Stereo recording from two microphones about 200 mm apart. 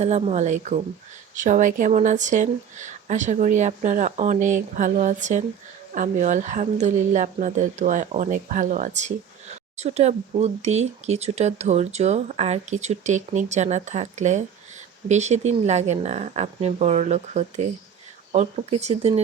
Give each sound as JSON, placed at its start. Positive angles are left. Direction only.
{"t": 0.0, "sound": "speech", "side_deg": -30}